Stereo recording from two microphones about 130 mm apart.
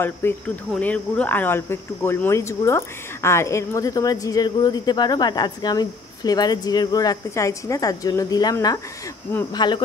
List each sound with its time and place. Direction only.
0.0 s speech: 15° left (ahead or behind); by 9.8 s 35° left (ahead or behind)